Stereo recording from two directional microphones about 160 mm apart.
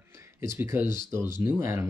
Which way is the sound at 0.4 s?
15° right (ahead or behind).